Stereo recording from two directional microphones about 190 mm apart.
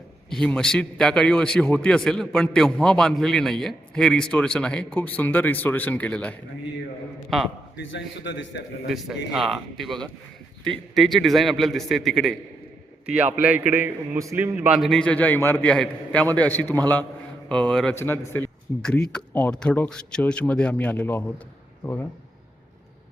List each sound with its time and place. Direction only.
0.3 s a man's voice: 5° left (ahead or behind)
7.8 s a man's voice: 75° left (ahead or behind)
8.9 s a man's voice: centre (ahead or behind)
14.8 s a man's voice: 5° left (ahead or behind)